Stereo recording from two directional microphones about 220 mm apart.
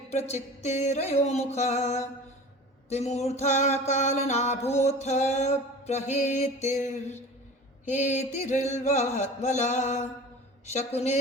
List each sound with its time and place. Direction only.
0.1 s music: 30° left (ahead or behind)